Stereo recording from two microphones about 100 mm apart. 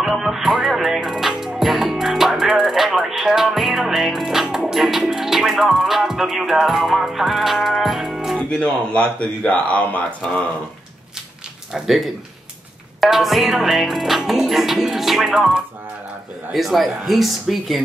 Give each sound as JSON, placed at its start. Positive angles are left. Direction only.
{"t": 0.0, "sound": "music", "side_deg": -5}
{"t": 1.3, "sound": "speech", "side_deg": -5}
{"t": 8.4, "sound": "speech", "side_deg": 10}
{"t": 11.7, "sound": "music", "side_deg": 0}